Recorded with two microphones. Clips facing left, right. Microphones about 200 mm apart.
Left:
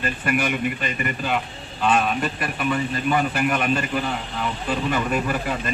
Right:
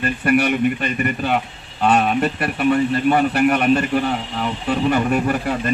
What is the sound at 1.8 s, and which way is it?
A man's voice, 45° right (ahead or behind).